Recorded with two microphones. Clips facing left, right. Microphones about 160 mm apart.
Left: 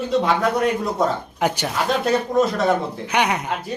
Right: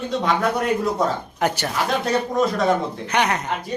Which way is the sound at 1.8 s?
Centre (ahead or behind).